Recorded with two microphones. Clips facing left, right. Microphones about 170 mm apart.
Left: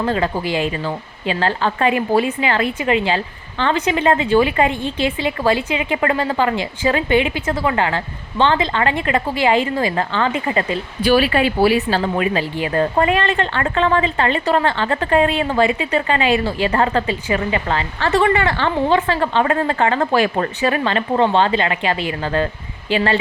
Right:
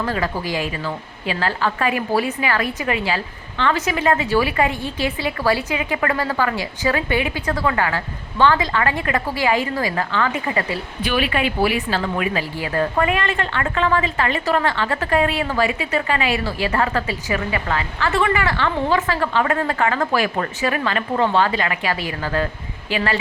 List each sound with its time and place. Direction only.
0.0 s speech: 25° left (ahead or behind)
11.1 s speech: 35° left (ahead or behind)